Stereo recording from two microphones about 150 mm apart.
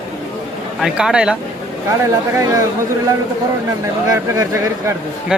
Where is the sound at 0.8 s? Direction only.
5° right (ahead or behind).